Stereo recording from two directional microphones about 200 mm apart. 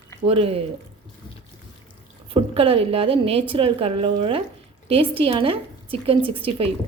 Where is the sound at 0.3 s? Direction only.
30° right (ahead or behind).